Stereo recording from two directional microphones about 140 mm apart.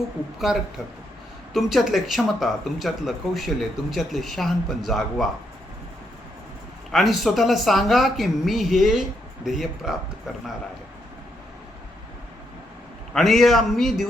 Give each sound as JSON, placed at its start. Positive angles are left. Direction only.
{"t": 0.5, "sound": "speech", "side_deg": -5}
{"t": 6.9, "sound": "speech", "side_deg": 0}
{"t": 13.1, "sound": "speech", "side_deg": 0}